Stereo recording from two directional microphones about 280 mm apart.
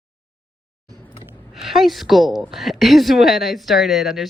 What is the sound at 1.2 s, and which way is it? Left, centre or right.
Speech, centre.